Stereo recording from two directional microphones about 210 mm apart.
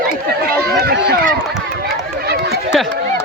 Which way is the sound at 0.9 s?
45° right (ahead or behind).